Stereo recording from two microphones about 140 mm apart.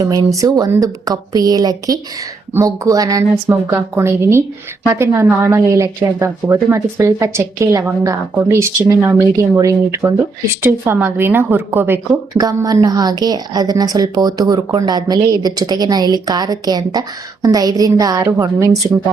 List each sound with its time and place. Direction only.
0.0 s a woman's voice: 25° right (ahead or behind)
12.3 s a woman's voice: 25° right (ahead or behind)